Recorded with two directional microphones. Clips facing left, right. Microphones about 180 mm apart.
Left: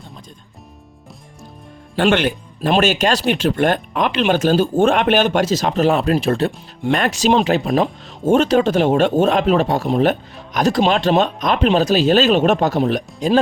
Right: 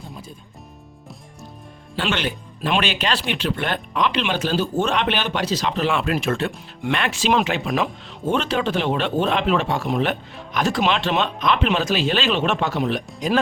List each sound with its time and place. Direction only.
2.0 s speech: 50° left (ahead or behind); by 13.4 s 30° left (ahead or behind)